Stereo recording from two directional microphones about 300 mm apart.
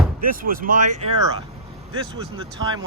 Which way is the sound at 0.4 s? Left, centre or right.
Right.